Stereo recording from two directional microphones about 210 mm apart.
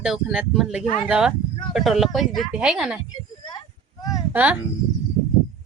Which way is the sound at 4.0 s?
15° left (ahead or behind).